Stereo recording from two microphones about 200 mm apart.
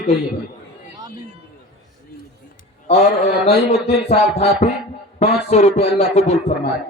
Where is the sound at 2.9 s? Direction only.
30° left (ahead or behind).